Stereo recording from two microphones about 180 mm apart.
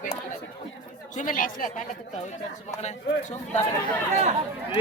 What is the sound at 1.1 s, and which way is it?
Speech, 50° left (ahead or behind).